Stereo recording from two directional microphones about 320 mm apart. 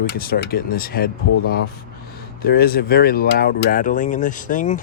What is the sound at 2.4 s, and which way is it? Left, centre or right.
Speech, left.